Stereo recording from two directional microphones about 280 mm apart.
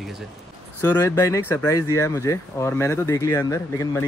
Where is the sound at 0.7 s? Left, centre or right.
Centre.